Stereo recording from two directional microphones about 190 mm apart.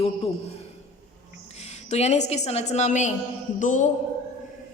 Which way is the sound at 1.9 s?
35° left (ahead or behind).